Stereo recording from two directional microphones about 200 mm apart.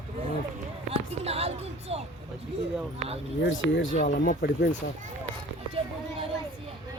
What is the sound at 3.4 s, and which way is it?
Speech, 70° left (ahead or behind).